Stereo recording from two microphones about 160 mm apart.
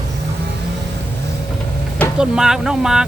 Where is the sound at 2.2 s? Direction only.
5° right (ahead or behind).